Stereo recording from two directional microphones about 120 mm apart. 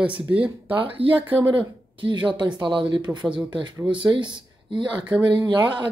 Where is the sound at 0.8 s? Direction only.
50° right (ahead or behind).